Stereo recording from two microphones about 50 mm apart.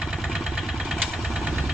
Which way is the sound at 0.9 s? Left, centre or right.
Centre.